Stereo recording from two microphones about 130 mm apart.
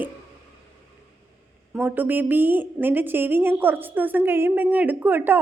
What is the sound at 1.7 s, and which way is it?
A woman's voice, 15° right (ahead or behind).